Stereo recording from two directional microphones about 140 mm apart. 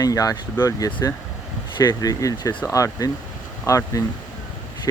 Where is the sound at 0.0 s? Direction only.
25° left (ahead or behind).